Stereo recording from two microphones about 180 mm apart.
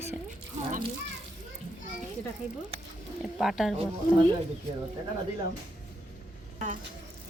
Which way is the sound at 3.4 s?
Centre (ahead or behind).